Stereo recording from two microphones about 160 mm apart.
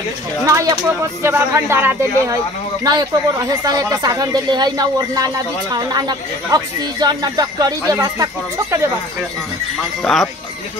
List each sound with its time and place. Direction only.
0.5 s speech: 20° right (ahead or behind)
10.1 s speech: centre (ahead or behind)